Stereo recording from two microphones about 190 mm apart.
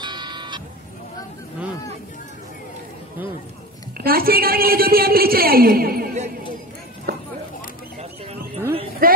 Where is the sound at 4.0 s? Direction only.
50° right (ahead or behind).